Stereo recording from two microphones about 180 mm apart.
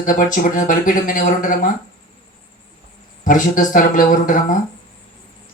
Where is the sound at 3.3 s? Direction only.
50° left (ahead or behind).